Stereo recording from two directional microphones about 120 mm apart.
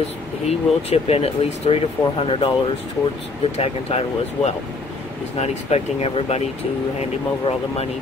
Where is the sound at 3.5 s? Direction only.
60° left (ahead or behind).